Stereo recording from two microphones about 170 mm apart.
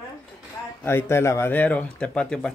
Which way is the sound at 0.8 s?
15° left (ahead or behind).